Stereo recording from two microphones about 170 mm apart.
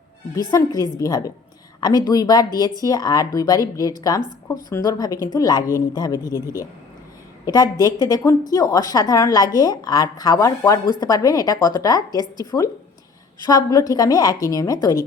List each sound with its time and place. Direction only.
0.3 s a woman's voice: 20° left (ahead or behind)
7.4 s a woman's voice: 20° left (ahead or behind)